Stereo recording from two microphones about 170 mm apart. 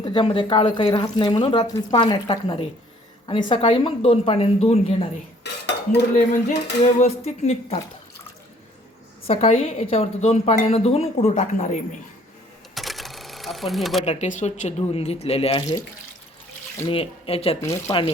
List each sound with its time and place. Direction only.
0.0 s a woman's voice: 30° left (ahead or behind)
5.4 s dishes: 90° left
6.3 s a woman's voice: 40° left (ahead or behind)
9.2 s a woman's voice: 35° left (ahead or behind)
12.7 s sewing machine: centre (ahead or behind)
14.0 s a woman's voice: 40° left (ahead or behind)
16.8 s a woman's voice: 35° left (ahead or behind)
17.6 s speech: 20° left (ahead or behind)